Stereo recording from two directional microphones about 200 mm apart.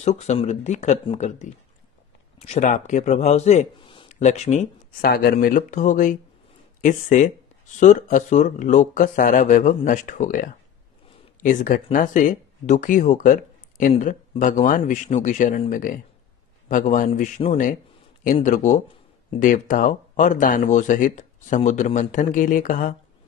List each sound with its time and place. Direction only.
0.0 s a man's voice: 35° left (ahead or behind)
4.1 s speech: 35° left (ahead or behind)
5.1 s speech: 45° left (ahead or behind)